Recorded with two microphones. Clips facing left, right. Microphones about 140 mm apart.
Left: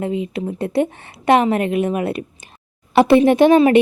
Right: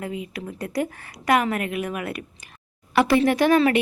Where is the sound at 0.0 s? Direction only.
25° left (ahead or behind).